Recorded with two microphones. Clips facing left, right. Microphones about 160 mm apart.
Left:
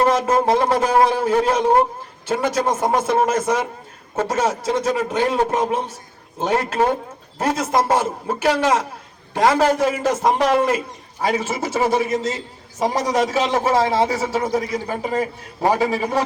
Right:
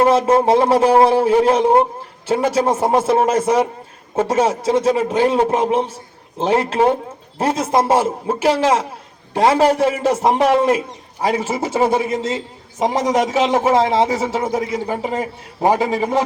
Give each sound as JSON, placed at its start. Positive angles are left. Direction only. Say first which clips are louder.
{"t": 0.1, "sound": "a man's voice", "louder": "right 4 dB", "side_deg": -25}